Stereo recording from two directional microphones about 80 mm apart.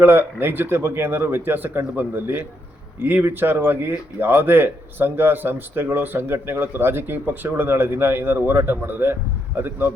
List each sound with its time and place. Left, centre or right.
0.0 s speech: right